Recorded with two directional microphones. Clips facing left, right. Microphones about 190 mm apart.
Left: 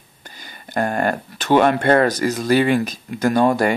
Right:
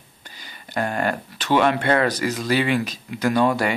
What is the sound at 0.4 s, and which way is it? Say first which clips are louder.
Speech: left 4 dB; 50° left (ahead or behind).